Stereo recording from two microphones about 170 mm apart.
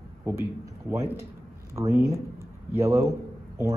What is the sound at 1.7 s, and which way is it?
Speech, 15° right (ahead or behind).